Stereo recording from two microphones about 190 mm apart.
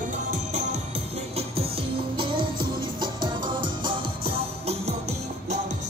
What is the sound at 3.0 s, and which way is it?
Music, 25° right (ahead or behind).